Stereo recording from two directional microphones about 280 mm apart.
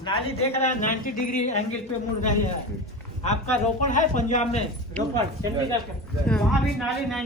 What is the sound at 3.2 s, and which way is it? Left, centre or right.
A man's voice, left.